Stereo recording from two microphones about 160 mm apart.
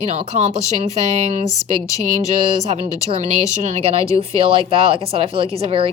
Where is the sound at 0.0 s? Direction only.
40° right (ahead or behind).